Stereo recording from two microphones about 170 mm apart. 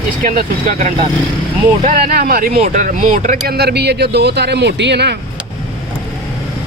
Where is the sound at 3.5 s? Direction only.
70° right (ahead or behind).